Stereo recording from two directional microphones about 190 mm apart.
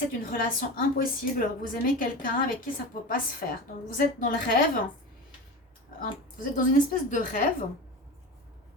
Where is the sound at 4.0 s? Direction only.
45° left (ahead or behind).